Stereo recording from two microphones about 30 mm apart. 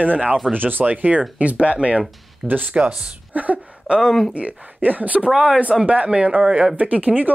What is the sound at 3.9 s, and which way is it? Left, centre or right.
Speech, centre.